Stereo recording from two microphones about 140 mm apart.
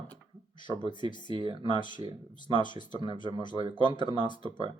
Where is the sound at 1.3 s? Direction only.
35° right (ahead or behind).